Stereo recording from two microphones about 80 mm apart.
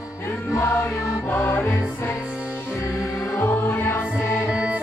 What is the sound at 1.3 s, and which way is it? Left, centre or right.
Music, left.